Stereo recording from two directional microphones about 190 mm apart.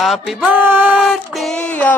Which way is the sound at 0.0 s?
Centre (ahead or behind).